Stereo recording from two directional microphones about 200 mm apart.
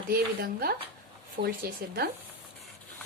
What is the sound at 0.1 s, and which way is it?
Speech, 50° right (ahead or behind).